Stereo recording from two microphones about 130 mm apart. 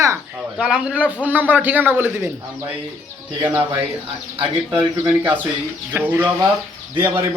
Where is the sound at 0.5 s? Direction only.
5° right (ahead or behind).